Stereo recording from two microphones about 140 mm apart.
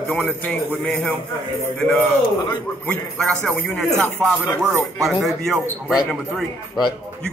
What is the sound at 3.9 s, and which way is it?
Speech, 20° right (ahead or behind).